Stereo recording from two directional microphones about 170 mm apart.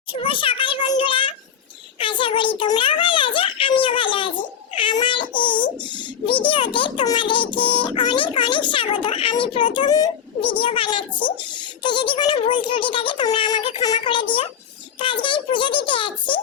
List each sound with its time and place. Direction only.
0.1 s a child's voice: 30° left (ahead or behind)